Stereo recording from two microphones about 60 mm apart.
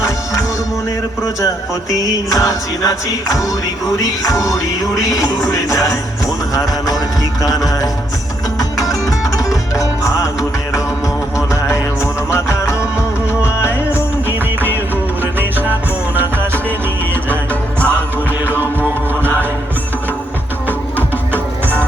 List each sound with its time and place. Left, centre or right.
2.3 s music: left
7.4 s music: left
13.4 s music: left
17.2 s music: left
18.4 s music: left
18.8 s music: right